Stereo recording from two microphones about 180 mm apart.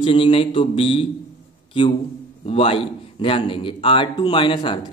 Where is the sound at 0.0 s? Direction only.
30° left (ahead or behind).